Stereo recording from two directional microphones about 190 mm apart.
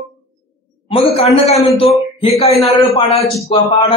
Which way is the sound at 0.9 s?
30° left (ahead or behind).